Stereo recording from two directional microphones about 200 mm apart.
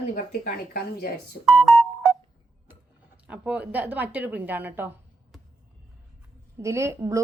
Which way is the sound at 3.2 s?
5° right (ahead or behind).